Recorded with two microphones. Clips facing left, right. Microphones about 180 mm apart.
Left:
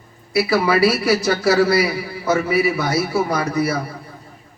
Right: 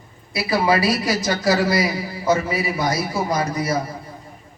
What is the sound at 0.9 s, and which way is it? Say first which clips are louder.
Speech: left 3 dB; 65° left (ahead or behind).